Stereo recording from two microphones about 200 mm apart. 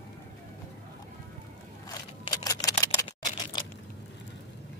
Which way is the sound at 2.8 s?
20° left (ahead or behind).